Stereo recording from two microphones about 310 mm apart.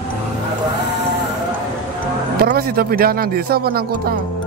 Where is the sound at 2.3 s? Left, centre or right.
Right.